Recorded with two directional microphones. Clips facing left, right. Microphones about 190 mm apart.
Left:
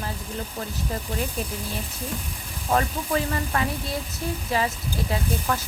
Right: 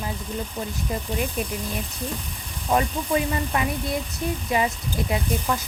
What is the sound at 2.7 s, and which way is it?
Speech, 15° right (ahead or behind).